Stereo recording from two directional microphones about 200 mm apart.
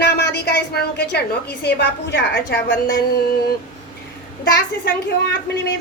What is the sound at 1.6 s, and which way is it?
A woman's voice, 55° left (ahead or behind).